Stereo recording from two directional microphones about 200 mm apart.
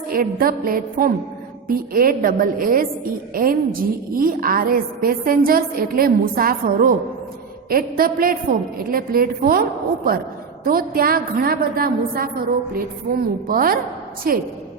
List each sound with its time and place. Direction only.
0.1 s a woman's voice: 45° right (ahead or behind)
13.5 s a woman's voice: 45° right (ahead or behind)